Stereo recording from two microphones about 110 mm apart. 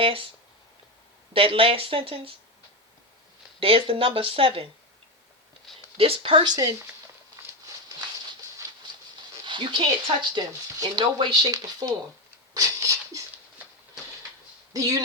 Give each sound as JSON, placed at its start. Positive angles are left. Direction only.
{"t": 0.0, "sound": "speech", "side_deg": -55}
{"t": 1.3, "sound": "speech", "side_deg": -55}
{"t": 3.6, "sound": "speech", "side_deg": -60}
{"t": 6.0, "sound": "speech", "side_deg": -55}
{"t": 9.4, "sound": "dog", "side_deg": -50}
{"t": 10.3, "sound": "speech", "side_deg": -45}
{"t": 11.4, "sound": "speech", "side_deg": -35}
{"t": 12.5, "sound": "beatboxing", "side_deg": -30}
{"t": 14.7, "sound": "speech", "side_deg": -30}